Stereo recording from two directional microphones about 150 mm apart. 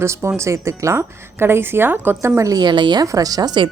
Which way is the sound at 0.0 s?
15° right (ahead or behind).